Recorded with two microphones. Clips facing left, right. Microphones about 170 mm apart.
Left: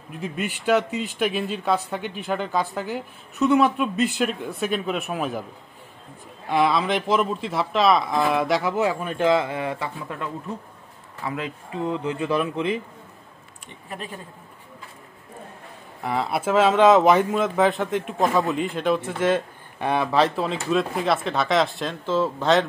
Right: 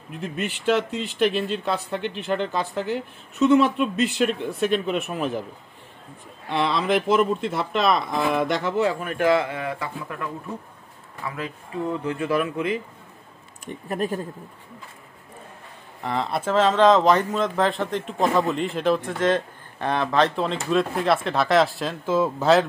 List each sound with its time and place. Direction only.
0.9 s speech: 5° left (ahead or behind)
6.6 s speech: 5° left (ahead or behind)
9.0 s speech: 25° left (ahead or behind)
13.8 s speech: 45° right (ahead or behind)
16.0 s speech: 5° left (ahead or behind)